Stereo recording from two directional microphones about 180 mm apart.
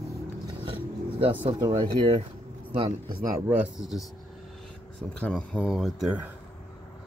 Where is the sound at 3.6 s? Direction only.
Centre (ahead or behind).